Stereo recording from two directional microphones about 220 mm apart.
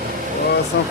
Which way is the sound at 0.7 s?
55° left (ahead or behind).